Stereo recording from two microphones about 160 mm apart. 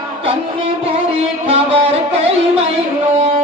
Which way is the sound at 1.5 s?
40° right (ahead or behind).